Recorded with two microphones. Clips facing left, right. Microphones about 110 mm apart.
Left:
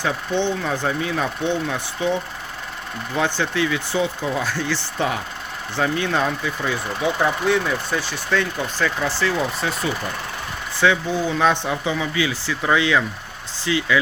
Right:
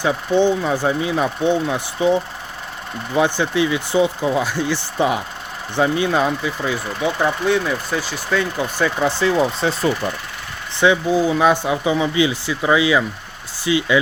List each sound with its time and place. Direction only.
0.0 s speech: 10° right (ahead or behind)
11.1 s speech: 10° right (ahead or behind)
11.9 s speech: 20° right (ahead or behind)
12.6 s speech: 10° right (ahead or behind)